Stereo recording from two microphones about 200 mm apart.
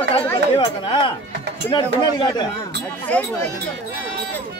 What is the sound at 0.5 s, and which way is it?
Speech, 25° left (ahead or behind).